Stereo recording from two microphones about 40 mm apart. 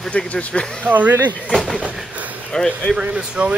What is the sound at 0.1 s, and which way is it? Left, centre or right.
Speech, left.